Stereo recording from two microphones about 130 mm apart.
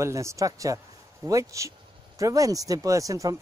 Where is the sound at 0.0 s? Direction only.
20° right (ahead or behind).